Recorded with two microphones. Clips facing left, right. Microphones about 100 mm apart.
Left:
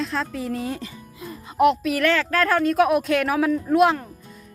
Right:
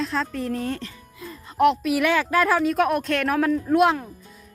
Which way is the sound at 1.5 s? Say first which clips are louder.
Even; centre (ahead or behind).